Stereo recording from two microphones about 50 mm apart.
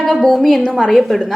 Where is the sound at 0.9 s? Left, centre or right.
Centre.